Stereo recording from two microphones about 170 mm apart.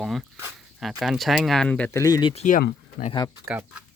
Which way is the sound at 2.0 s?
25° left (ahead or behind).